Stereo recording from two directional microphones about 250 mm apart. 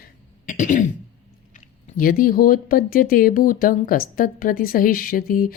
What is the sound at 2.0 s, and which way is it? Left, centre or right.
Speech, left.